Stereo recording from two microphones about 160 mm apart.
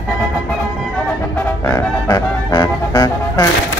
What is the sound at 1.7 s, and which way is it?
Music, 15° left (ahead or behind).